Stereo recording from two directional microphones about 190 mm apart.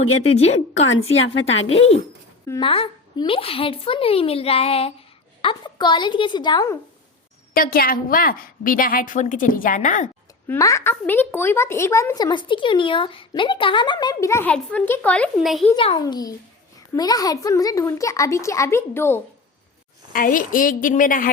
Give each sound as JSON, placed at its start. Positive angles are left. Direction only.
{"t": 0.4, "sound": "a woman's voice", "side_deg": 90}
{"t": 1.7, "sound": "a woman's voice", "side_deg": 30}
{"t": 7.5, "sound": "a woman's voice", "side_deg": 50}
{"t": 10.4, "sound": "a woman's voice", "side_deg": 15}
{"t": 15.7, "sound": "a woman's voice", "side_deg": 25}
{"t": 20.1, "sound": "a woman's voice", "side_deg": 45}